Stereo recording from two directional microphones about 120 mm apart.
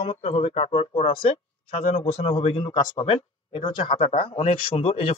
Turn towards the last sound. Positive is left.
turn(degrees=55)  # may be behind; listen again after turning